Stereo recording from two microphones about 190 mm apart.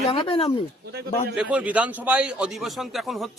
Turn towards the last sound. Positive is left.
turn(degrees=0)  # may be behind; listen again after turning